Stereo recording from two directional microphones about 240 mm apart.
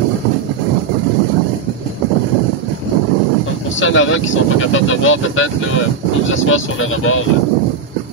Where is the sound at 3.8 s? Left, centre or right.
Left.